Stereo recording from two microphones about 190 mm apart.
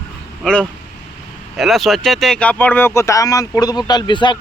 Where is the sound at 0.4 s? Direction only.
5° left (ahead or behind).